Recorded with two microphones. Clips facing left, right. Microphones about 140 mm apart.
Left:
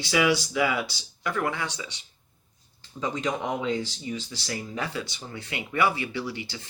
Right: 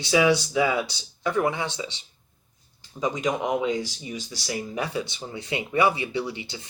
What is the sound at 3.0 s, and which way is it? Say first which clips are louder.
Speech: right 3 dB; 15° right (ahead or behind).